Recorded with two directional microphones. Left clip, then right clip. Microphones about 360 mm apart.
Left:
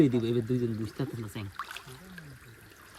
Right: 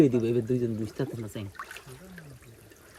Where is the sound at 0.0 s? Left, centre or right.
Centre.